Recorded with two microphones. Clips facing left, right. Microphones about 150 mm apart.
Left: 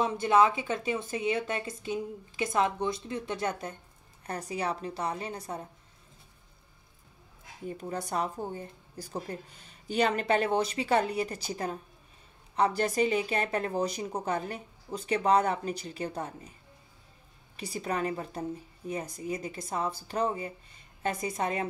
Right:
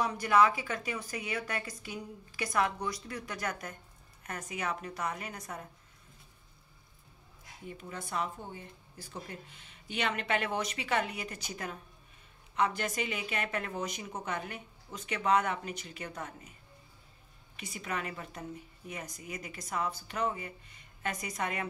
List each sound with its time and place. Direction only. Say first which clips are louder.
0.0 s a woman's voice: left 3 dB; 25° left (ahead or behind)
7.6 s speech: left 7 dB; 40° left (ahead or behind)
17.6 s speech: left 6 dB; 35° left (ahead or behind)